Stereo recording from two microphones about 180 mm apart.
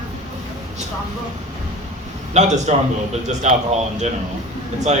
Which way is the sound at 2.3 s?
40° right (ahead or behind).